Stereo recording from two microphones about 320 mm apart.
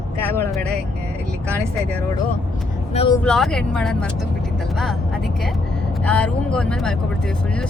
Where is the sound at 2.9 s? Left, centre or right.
Centre.